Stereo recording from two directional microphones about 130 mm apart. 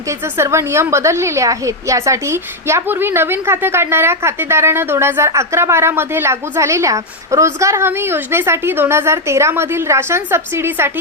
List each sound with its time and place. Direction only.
0.3 s a woman's voice: 20° right (ahead or behind)